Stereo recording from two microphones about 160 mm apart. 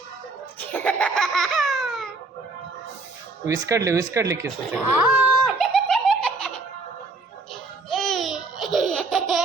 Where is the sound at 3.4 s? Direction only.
20° right (ahead or behind).